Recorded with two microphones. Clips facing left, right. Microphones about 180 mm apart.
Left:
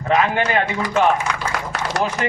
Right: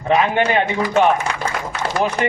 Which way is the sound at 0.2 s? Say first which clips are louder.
Right 2 dB; 20° right (ahead or behind).